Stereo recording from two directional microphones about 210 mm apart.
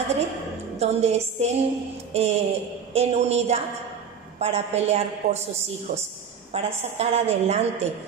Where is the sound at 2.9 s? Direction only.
30° right (ahead or behind).